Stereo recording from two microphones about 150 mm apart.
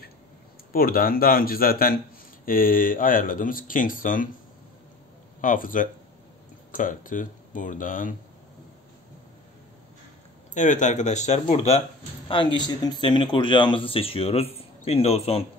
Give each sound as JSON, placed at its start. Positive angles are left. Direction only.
{"t": 0.7, "sound": "speech", "side_deg": 75}
{"t": 5.4, "sound": "speech", "side_deg": 65}
{"t": 10.5, "sound": "speech", "side_deg": 55}